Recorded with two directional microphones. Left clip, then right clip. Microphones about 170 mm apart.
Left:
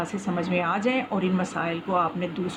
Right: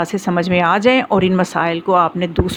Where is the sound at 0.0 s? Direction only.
50° right (ahead or behind).